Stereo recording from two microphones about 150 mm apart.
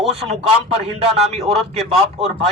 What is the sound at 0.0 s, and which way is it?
Speech, 45° right (ahead or behind).